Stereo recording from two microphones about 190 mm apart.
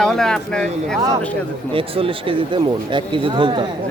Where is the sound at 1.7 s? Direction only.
30° right (ahead or behind).